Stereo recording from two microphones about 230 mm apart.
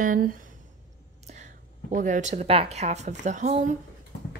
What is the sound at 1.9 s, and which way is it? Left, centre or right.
A woman's voice, right.